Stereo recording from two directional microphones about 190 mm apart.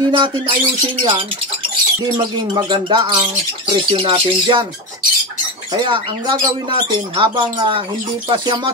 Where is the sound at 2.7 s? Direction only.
25° right (ahead or behind).